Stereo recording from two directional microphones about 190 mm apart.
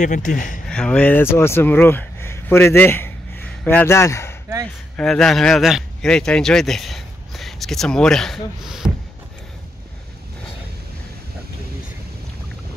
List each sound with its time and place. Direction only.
0.0 s speech: 40° left (ahead or behind)
0.7 s speech: 5° left (ahead or behind)
4.9 s speech: 5° left (ahead or behind)